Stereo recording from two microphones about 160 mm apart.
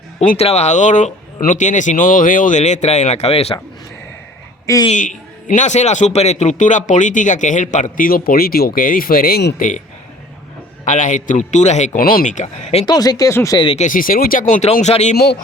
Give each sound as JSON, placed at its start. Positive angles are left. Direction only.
{"t": 0.2, "sound": "a man's voice", "side_deg": 40}
{"t": 4.6, "sound": "a man's voice", "side_deg": 20}
{"t": 4.9, "sound": "a man's voice", "side_deg": 50}
{"t": 9.6, "sound": "a man's voice", "side_deg": 55}
{"t": 10.8, "sound": "a man's voice", "side_deg": 50}
{"t": 12.0, "sound": "a man's voice", "side_deg": 55}
{"t": 12.8, "sound": "speech", "side_deg": 25}
{"t": 13.6, "sound": "speech", "side_deg": 35}
{"t": 13.8, "sound": "a man's voice", "side_deg": 60}